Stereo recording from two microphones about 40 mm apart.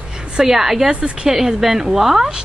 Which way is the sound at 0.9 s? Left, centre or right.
Right.